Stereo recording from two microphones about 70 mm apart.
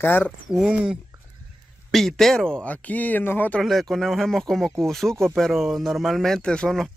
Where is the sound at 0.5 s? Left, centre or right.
Centre.